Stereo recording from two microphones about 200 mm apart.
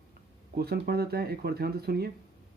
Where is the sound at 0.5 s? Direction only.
50° right (ahead or behind).